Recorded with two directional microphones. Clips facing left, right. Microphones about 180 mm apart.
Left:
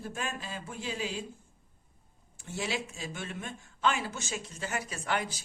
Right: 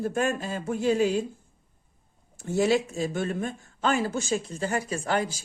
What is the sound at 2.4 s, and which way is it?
A man's voice, 45° right (ahead or behind).